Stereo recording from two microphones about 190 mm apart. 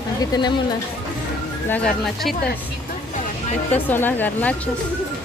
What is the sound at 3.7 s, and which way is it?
Speech, 10° left (ahead or behind).